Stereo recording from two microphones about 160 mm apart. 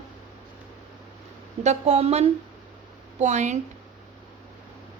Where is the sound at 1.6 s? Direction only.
45° right (ahead or behind).